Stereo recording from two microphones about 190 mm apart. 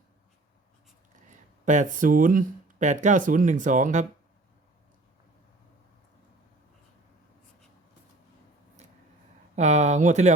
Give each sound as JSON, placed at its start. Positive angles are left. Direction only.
{"t": 1.3, "sound": "speech", "side_deg": -40}
{"t": 9.6, "sound": "speech", "side_deg": -35}